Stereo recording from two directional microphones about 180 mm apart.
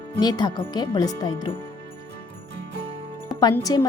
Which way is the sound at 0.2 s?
20° left (ahead or behind).